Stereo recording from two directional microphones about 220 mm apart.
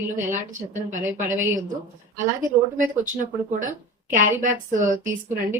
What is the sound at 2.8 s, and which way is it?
Speech, 35° right (ahead or behind).